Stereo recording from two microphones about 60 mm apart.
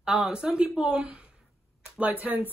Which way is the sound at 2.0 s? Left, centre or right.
Right.